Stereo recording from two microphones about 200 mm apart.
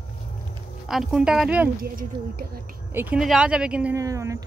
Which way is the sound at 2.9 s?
10° right (ahead or behind).